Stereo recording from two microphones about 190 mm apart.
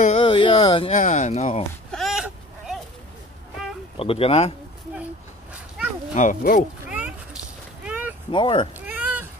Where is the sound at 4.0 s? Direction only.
30° left (ahead or behind).